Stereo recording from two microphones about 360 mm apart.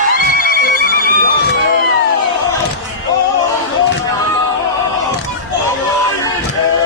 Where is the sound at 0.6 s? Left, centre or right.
Left.